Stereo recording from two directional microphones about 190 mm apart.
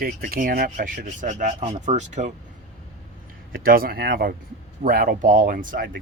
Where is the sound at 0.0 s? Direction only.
50° right (ahead or behind).